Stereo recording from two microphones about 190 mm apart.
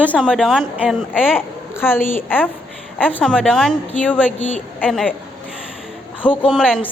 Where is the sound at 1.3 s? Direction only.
10° left (ahead or behind).